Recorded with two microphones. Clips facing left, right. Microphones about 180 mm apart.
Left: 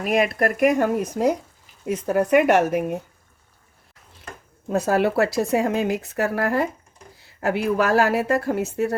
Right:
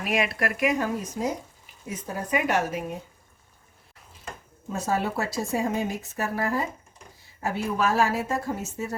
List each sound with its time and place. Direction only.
0.0 s speech: 45° left (ahead or behind)
0.8 s speech: 65° left (ahead or behind)
4.7 s speech: 70° left (ahead or behind)